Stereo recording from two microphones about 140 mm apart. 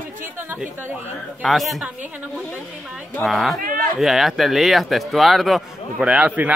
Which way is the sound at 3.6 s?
90° right.